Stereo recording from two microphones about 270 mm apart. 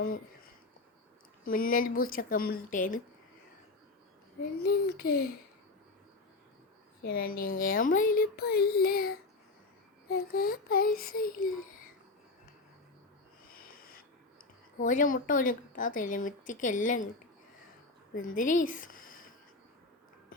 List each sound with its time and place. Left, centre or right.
1.5 s a child's voice: left
4.6 s a child's voice: left
7.0 s a child's voice: left
13.5 s wheeze: left
14.8 s speech: left
18.1 s a child's voice: left